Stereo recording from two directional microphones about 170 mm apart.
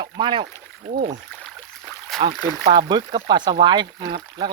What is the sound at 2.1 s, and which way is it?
Speech, centre (ahead or behind).